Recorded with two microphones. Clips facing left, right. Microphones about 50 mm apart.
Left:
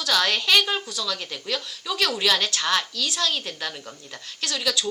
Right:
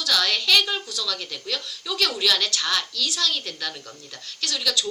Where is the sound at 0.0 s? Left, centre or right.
Left.